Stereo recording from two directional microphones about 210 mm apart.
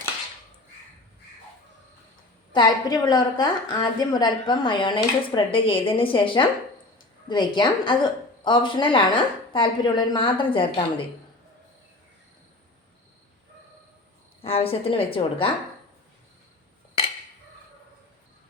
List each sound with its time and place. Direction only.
2.5 s a woman's voice: 20° left (ahead or behind)
14.4 s a woman's voice: 25° left (ahead or behind)